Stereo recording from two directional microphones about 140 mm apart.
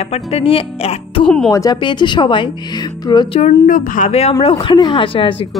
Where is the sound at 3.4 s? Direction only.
65° left (ahead or behind); by 4.3 s 50° left (ahead or behind).